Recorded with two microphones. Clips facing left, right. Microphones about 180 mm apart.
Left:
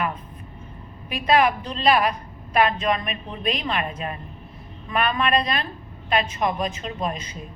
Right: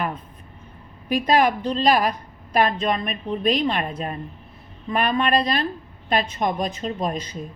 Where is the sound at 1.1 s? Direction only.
40° right (ahead or behind).